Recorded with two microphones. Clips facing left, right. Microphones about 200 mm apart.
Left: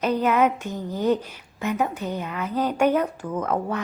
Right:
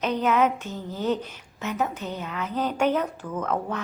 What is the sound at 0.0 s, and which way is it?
A woman's voice, 10° left (ahead or behind).